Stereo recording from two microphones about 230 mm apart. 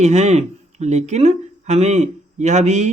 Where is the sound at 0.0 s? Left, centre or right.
Right.